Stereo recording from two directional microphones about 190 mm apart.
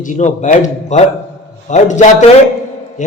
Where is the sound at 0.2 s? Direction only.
40° left (ahead or behind).